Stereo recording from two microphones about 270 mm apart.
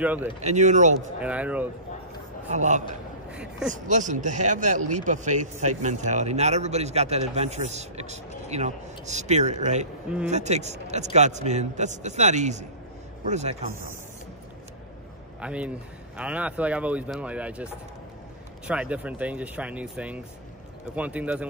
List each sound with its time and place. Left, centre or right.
0.0 s speech: centre
0.4 s speech: right
1.2 s speech: centre
2.5 s speech: right
3.3 s speech: centre
3.7 s speech: right
15.4 s speech: centre
18.7 s speech: centre